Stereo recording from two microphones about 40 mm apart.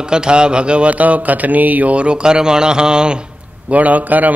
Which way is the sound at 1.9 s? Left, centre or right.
Right.